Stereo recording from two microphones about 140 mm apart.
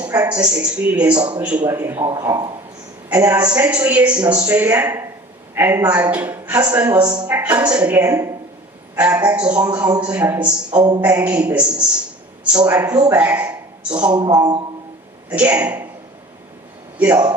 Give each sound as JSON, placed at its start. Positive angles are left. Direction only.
{"t": 0.3, "sound": "a man's voice", "side_deg": -10}
{"t": 3.1, "sound": "a man's voice", "side_deg": -15}
{"t": 7.0, "sound": "speech", "side_deg": -30}
{"t": 7.3, "sound": "a woman's voice", "side_deg": -10}
{"t": 10.8, "sound": "speech", "side_deg": -30}
{"t": 11.0, "sound": "speech", "side_deg": -10}
{"t": 14.1, "sound": "speech", "side_deg": -30}
{"t": 15.3, "sound": "speech", "side_deg": -10}
{"t": 17.0, "sound": "speech", "side_deg": -10}